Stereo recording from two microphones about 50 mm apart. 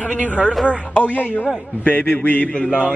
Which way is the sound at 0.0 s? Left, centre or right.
Left.